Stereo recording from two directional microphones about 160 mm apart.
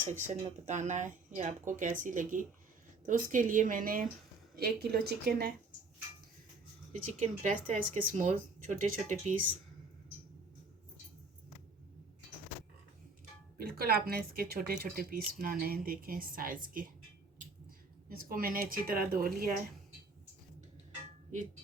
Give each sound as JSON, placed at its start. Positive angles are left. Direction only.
{"t": 0.0, "sound": "a woman's voice", "side_deg": -50}
{"t": 4.5, "sound": "speech", "side_deg": -75}
{"t": 7.1, "sound": "speech", "side_deg": -50}
{"t": 13.6, "sound": "speech", "side_deg": -70}
{"t": 18.3, "sound": "a woman's voice", "side_deg": -65}